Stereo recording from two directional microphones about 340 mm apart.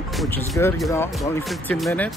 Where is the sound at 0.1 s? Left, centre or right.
Centre.